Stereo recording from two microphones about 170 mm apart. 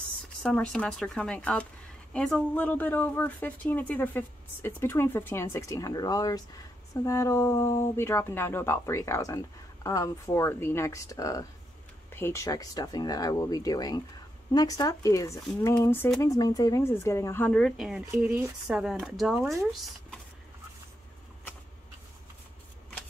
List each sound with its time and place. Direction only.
0.4 s speech: 5° left (ahead or behind)
17.5 s speech: 5° left (ahead or behind)